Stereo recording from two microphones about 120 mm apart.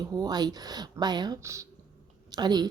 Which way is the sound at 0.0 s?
35° right (ahead or behind).